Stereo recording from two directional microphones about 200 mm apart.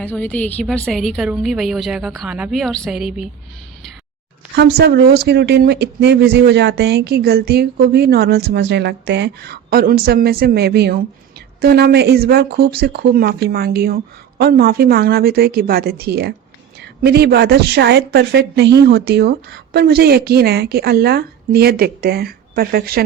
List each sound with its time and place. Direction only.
0.0 s a woman's voice: 10° left (ahead or behind)
4.5 s speech: 55° right (ahead or behind)